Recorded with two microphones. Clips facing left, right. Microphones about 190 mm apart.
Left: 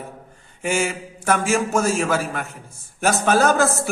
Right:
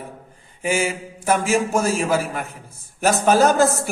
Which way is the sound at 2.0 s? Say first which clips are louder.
Right 1 dB; 10° right (ahead or behind).